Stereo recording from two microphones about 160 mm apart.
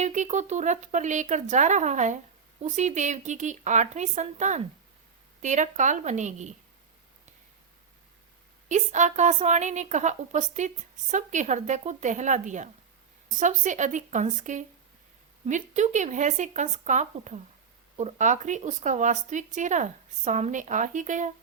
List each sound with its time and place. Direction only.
0.0 s a woman's voice: 45° right (ahead or behind)
8.7 s a woman's voice: 50° right (ahead or behind)